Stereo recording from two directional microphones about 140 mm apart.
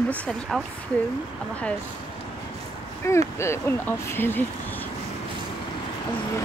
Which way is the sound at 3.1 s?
20° left (ahead or behind).